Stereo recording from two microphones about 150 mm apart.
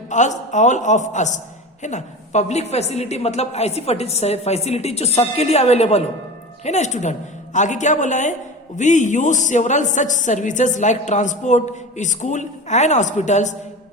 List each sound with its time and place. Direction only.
0.1 s a woman's voice: 55° left (ahead or behind)